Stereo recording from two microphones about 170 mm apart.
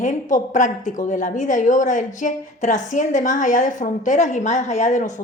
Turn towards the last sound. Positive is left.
turn(degrees=45)  # may be behind; listen again after turning